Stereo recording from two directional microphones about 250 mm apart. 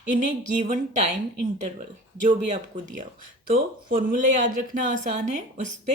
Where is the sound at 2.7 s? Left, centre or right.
Right.